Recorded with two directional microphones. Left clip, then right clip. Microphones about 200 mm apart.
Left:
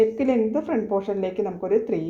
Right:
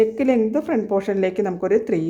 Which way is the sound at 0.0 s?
25° right (ahead or behind).